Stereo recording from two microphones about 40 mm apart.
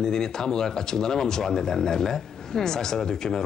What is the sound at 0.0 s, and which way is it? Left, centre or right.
Speech, centre.